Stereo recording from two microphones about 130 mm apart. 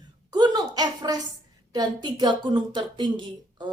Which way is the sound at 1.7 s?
35° right (ahead or behind).